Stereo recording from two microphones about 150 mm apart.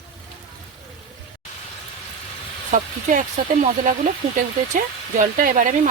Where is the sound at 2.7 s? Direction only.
55° right (ahead or behind).